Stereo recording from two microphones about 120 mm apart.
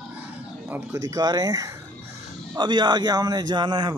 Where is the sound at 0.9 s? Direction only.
30° right (ahead or behind).